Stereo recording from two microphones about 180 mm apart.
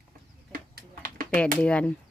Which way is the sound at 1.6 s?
5° left (ahead or behind).